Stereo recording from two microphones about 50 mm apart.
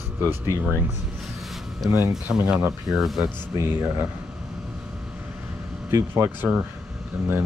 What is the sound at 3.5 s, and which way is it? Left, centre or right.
Speech, right.